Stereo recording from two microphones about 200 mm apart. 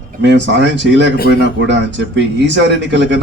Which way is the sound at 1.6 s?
65° right (ahead or behind).